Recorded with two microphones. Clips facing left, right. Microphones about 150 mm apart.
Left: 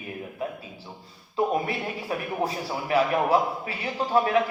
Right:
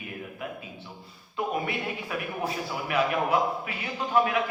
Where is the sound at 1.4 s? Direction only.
35° left (ahead or behind).